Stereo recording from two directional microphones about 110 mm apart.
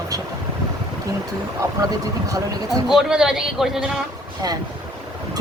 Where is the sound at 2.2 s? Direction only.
30° right (ahead or behind).